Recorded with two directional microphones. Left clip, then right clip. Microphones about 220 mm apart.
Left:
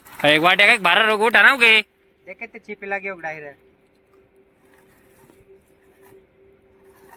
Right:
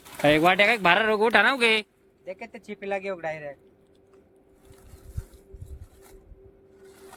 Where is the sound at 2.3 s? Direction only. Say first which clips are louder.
Left 3 dB; 50° right (ahead or behind).